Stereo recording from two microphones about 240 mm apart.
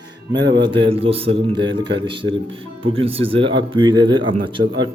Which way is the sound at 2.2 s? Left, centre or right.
Right.